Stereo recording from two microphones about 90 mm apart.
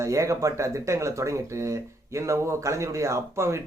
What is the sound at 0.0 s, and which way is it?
Speech, 35° right (ahead or behind).